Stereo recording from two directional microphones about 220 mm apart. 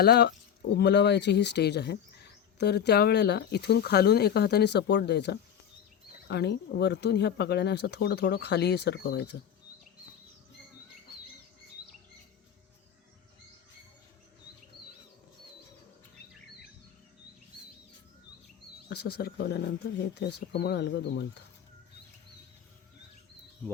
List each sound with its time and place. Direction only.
0.0 s speech: 45° left (ahead or behind)
18.9 s speech: 45° left (ahead or behind)